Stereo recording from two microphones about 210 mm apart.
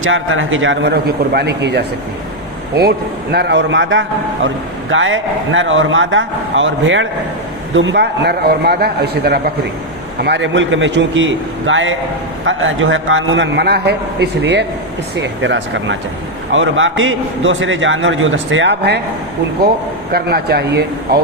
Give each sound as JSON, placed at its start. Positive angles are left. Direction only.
{"t": 0.0, "sound": "speech", "side_deg": -70}
{"t": 3.3, "sound": "a man's voice", "side_deg": -55}
{"t": 20.1, "sound": "a man's voice", "side_deg": -50}